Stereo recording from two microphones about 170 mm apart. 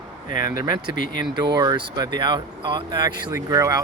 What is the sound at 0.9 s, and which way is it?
Speech, 55° left (ahead or behind).